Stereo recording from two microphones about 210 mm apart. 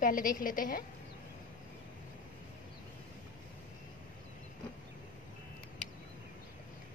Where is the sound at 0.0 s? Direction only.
40° left (ahead or behind).